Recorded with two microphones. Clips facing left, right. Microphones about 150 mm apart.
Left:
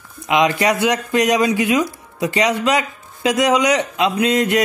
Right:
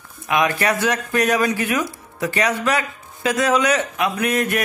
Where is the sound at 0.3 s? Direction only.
20° left (ahead or behind).